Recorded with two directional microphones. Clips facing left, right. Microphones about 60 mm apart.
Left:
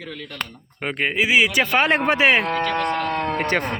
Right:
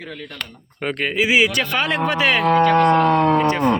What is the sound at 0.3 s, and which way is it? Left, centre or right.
Speech, centre.